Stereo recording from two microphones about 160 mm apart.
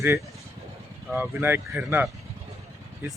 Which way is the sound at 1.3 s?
15° right (ahead or behind).